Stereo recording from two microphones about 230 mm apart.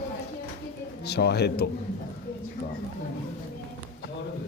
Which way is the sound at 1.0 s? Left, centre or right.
Left.